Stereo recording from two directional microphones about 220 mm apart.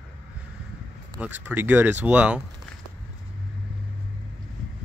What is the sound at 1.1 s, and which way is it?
Speech, 5° right (ahead or behind).